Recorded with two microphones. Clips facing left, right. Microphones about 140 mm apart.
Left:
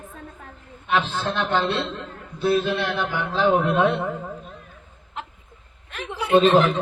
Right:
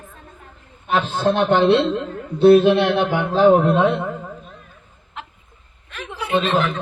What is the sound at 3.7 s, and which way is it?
Speech, 20° right (ahead or behind).